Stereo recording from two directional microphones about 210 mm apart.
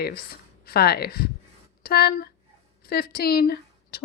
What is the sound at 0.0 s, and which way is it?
Speech, 50° left (ahead or behind).